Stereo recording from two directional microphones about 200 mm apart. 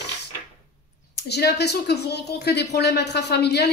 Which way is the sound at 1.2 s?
55° left (ahead or behind).